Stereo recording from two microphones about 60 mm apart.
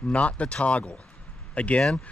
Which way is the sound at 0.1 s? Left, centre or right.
Left.